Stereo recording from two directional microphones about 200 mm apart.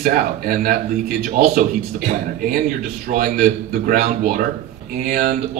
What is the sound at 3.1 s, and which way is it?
Speech, 45° right (ahead or behind).